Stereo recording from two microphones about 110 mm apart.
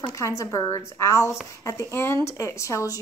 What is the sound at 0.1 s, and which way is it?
A woman's voice, 30° left (ahead or behind).